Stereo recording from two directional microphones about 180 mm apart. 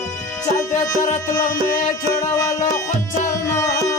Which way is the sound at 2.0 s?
20° left (ahead or behind).